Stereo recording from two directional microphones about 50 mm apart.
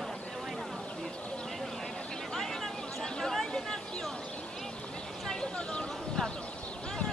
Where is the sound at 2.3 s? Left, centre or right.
Centre.